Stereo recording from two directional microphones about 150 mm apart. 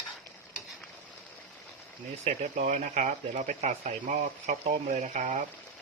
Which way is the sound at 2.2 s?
50° right (ahead or behind).